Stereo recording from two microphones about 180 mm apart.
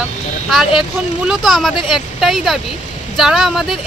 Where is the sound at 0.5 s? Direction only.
Centre (ahead or behind).